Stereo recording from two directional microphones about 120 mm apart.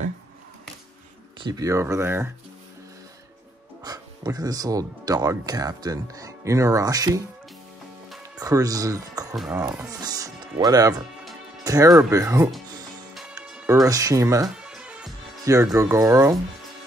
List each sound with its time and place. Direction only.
1.4 s speech: 30° right (ahead or behind)
3.8 s speech: 30° right (ahead or behind)
8.4 s music: 30° right (ahead or behind)
9.5 s speech: 15° right (ahead or behind)
9.8 s speech: 30° right (ahead or behind)
11.6 s music: 30° right (ahead or behind)
12.1 s speech: 25° right (ahead or behind)
13.8 s speech: 30° right (ahead or behind)
14.6 s music: 10° right (ahead or behind)
15.4 s speech: 25° right (ahead or behind)